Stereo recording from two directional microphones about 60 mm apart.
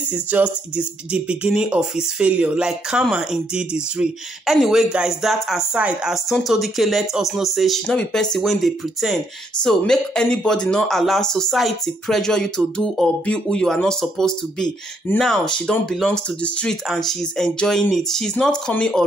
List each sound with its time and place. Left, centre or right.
0.1 s speech: right
4.5 s speech: centre
7.8 s speech: centre
8.4 s speech: centre
9.8 s speech: centre
16.4 s speech: centre
16.9 s speech: centre